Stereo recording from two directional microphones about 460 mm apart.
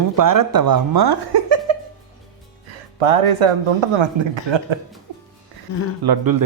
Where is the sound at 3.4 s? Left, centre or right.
Right.